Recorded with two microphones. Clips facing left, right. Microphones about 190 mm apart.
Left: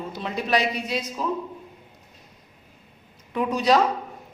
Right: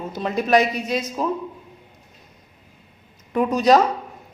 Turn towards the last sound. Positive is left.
turn(degrees=-45)  # may be behind; listen again after turning